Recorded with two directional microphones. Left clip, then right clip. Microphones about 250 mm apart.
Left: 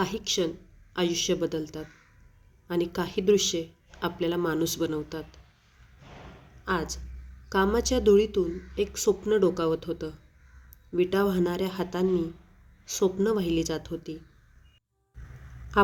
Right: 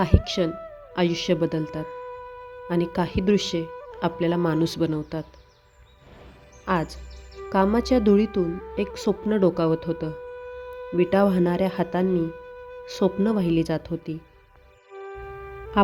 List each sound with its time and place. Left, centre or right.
0.0 s speech: right
6.7 s speech: right